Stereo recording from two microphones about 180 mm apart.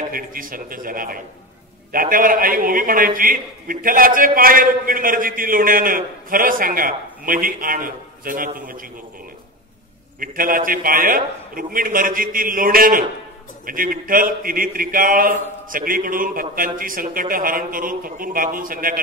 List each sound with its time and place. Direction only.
0.1 s a man's voice: 50° right (ahead or behind)
10.2 s a man's voice: 50° right (ahead or behind)